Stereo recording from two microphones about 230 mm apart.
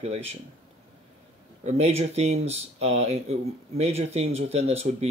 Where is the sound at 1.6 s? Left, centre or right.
Right.